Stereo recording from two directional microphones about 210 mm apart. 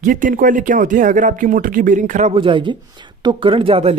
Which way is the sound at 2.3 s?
25° right (ahead or behind).